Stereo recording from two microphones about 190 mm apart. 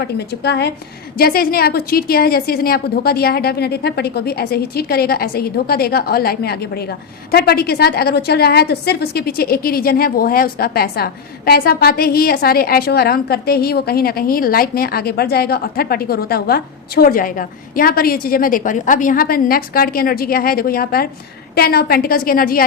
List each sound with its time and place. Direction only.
0.0 s a woman's voice: 60° left (ahead or behind)